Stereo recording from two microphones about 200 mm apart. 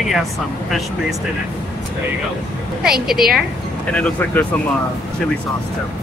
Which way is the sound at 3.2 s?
50° right (ahead or behind).